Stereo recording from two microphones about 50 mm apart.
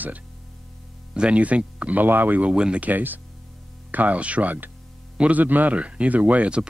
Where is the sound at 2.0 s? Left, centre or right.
Right.